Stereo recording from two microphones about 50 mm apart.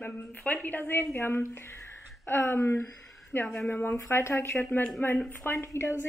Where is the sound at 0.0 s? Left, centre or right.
Left.